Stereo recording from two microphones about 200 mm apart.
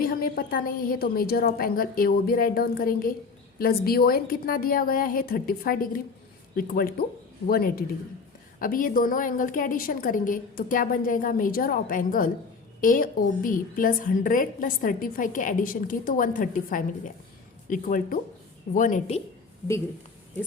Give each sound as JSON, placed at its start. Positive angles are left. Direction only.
{"t": 0.0, "sound": "a woman's voice", "side_deg": 50}